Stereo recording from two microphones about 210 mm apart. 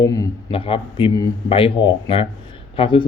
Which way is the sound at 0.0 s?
15° left (ahead or behind).